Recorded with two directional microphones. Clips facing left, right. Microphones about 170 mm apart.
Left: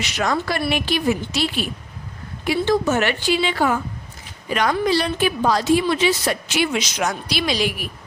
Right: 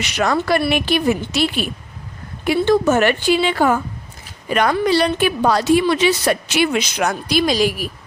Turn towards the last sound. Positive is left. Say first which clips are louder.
# right 5 dB
turn(degrees=-40)  # may be behind; listen again after turning